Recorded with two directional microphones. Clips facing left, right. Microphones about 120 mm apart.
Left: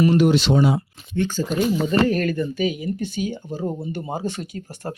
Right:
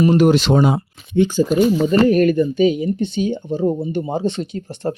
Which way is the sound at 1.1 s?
15° right (ahead or behind).